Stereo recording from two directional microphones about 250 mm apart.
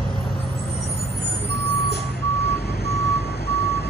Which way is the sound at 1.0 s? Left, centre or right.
Left.